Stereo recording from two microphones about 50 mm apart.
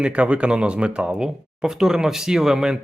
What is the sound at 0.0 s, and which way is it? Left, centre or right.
Speech, right.